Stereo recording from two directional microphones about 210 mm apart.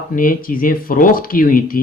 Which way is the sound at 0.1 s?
40° left (ahead or behind).